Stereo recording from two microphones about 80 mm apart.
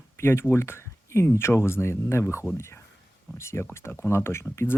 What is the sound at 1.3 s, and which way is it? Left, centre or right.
Speech, left.